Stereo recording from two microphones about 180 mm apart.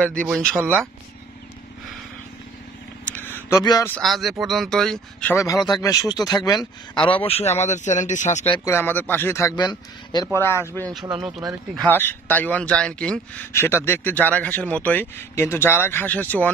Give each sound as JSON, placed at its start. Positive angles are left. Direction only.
{"t": 0.3, "sound": "speech", "side_deg": -10}
{"t": 3.1, "sound": "a sound", "side_deg": 10}
{"t": 4.0, "sound": "speech", "side_deg": 0}
{"t": 5.3, "sound": "a man's voice", "side_deg": 15}
{"t": 8.6, "sound": "speech", "side_deg": 10}
{"t": 11.7, "sound": "speech", "side_deg": 5}